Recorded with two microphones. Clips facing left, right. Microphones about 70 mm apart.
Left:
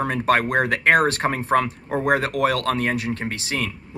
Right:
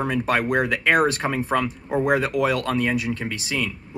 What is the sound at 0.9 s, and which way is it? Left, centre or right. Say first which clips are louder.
Speech: left 1 dB; left.